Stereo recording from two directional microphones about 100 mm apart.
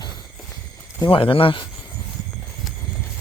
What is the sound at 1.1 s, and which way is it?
Speech, 65° left (ahead or behind).